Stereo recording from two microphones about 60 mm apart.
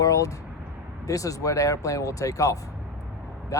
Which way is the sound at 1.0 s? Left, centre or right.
Left.